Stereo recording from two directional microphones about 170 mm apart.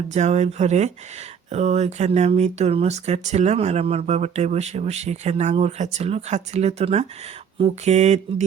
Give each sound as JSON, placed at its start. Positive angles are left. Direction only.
{"t": 0.1, "sound": "speech", "side_deg": -40}